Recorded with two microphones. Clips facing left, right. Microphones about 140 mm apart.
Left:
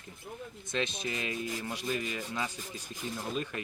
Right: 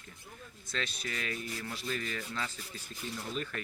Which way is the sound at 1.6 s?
20° left (ahead or behind).